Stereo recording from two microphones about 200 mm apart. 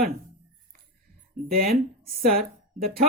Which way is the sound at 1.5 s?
50° right (ahead or behind).